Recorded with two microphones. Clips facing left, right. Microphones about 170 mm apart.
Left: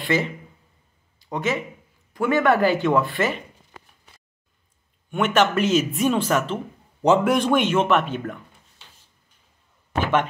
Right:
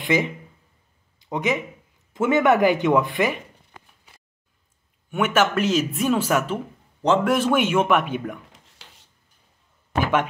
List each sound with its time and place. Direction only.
0.0 s speech: 15° right (ahead or behind)
5.1 s speech: 5° right (ahead or behind)
7.0 s a man's voice: 10° left (ahead or behind)
7.3 s speech: 5° right (ahead or behind)
8.8 s a sound: 90° right